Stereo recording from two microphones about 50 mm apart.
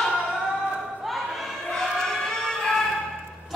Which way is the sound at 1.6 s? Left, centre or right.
Centre.